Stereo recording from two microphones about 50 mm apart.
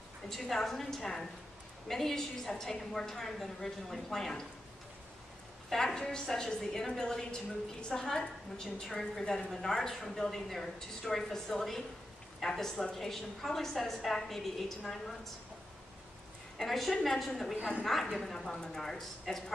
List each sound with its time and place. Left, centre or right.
0.3 s a woman's voice: centre
5.7 s a woman's voice: centre
16.5 s a woman's voice: centre